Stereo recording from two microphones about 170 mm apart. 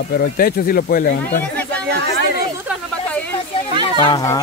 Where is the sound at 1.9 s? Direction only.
75° right (ahead or behind).